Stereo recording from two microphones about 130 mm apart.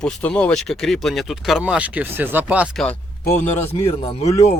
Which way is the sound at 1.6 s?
10° right (ahead or behind).